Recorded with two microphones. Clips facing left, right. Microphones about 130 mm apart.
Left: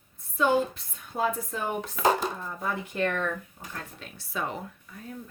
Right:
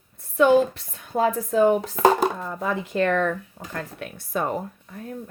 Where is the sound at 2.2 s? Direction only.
75° right (ahead or behind).